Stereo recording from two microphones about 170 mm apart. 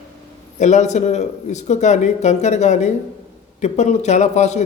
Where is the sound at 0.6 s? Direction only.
45° left (ahead or behind).